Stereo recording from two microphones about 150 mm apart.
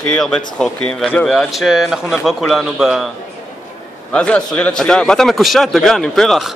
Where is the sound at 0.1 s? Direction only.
5° left (ahead or behind).